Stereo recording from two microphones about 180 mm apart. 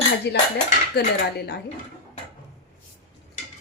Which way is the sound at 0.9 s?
65° left (ahead or behind).